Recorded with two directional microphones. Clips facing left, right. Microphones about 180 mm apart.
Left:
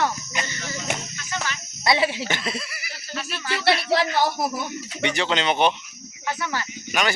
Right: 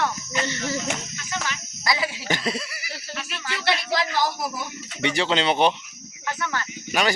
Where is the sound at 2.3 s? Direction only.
35° right (ahead or behind).